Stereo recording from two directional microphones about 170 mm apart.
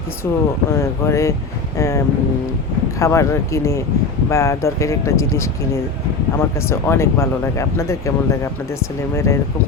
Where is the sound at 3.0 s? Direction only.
15° left (ahead or behind).